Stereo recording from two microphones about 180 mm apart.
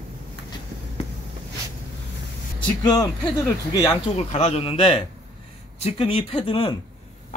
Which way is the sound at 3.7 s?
20° left (ahead or behind).